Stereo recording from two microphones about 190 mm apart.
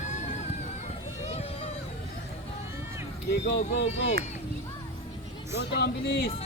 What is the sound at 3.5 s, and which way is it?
Speech, 60° left (ahead or behind).